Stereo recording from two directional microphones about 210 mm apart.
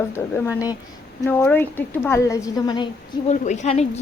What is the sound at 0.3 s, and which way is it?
Speech, 15° left (ahead or behind).